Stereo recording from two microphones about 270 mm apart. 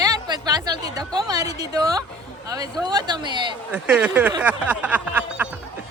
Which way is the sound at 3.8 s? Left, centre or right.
Centre.